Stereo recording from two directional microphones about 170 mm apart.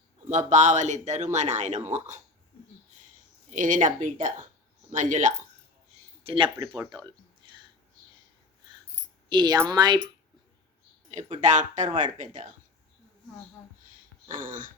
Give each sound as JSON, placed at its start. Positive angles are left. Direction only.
{"t": 0.3, "sound": "speech", "side_deg": -45}
{"t": 3.5, "sound": "speech", "side_deg": -50}
{"t": 6.2, "sound": "speech", "side_deg": -30}
{"t": 9.3, "sound": "speech", "side_deg": -25}
{"t": 11.1, "sound": "speech", "side_deg": -45}
{"t": 14.3, "sound": "speech", "side_deg": -50}